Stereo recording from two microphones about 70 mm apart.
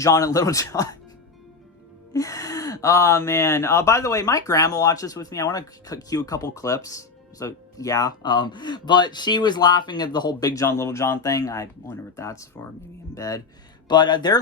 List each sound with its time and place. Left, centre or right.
0.0 s speech: left
2.1 s speech: left
8.2 s speech: left
10.6 s speech: left
13.1 s speech: left
13.8 s speech: left